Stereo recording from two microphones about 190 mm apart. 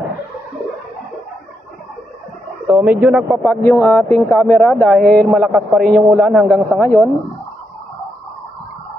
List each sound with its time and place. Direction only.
2.6 s a man's voice: 5° right (ahead or behind)
3.6 s a man's voice: 15° left (ahead or behind)